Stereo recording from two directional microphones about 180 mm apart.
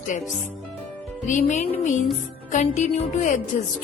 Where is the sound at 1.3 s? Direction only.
45° left (ahead or behind).